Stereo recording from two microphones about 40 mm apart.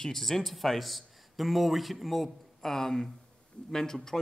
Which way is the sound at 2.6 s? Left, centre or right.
Centre.